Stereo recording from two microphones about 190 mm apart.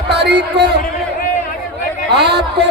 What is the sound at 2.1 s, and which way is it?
Speech, 60° right (ahead or behind).